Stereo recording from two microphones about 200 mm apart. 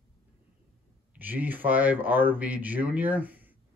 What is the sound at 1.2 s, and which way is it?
Speech, 10° right (ahead or behind).